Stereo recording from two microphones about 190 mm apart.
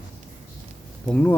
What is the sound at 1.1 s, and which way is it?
Speech, 10° left (ahead or behind).